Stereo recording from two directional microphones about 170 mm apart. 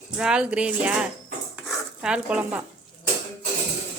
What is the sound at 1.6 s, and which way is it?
Stir, 5° right (ahead or behind).